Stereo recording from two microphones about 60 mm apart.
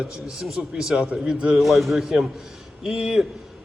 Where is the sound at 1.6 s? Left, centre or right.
Centre.